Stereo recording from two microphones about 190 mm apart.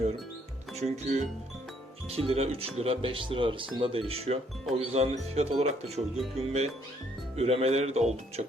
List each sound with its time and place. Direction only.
0.8 s speech: 35° right (ahead or behind)